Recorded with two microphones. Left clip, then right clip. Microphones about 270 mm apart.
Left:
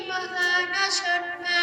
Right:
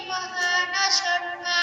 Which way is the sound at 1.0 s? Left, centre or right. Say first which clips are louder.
Even; centre.